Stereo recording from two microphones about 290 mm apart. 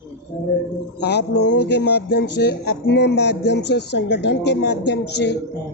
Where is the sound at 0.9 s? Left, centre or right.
Left.